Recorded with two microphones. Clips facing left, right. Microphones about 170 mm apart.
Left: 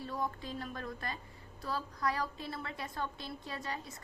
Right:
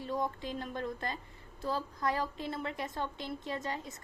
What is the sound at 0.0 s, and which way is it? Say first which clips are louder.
A woman's voice: right 3 dB; 20° right (ahead or behind).